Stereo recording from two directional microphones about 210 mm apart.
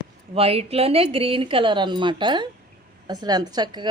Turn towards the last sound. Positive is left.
turn(degrees=-20)  # may be behind; listen again after turning